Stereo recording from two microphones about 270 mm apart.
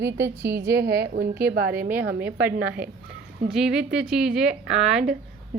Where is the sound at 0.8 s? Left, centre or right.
Right.